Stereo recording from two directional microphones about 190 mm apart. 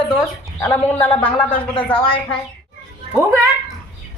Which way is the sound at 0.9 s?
10° left (ahead or behind).